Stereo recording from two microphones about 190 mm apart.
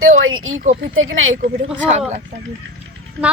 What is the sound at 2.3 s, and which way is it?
Speech, 40° right (ahead or behind).